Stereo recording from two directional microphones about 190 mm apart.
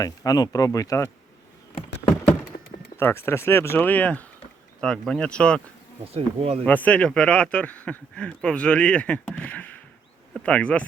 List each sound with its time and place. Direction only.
0.0 s speech: 20° left (ahead or behind)
3.0 s speech: 10° left (ahead or behind)
6.1 s speech: 30° right (ahead or behind)
6.7 s speech: 10° left (ahead or behind)